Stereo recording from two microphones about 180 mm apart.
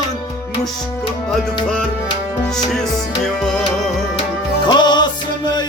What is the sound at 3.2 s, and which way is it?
Music, 5° left (ahead or behind).